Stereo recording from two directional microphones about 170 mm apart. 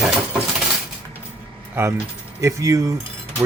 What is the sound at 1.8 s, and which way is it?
Speech, 15° right (ahead or behind).